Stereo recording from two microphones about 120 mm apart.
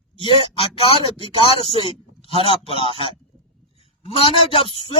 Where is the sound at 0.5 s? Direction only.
55° left (ahead or behind).